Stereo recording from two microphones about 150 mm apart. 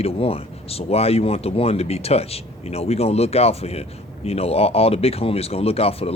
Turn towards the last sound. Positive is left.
turn(degrees=40)  # may be behind; listen again after turning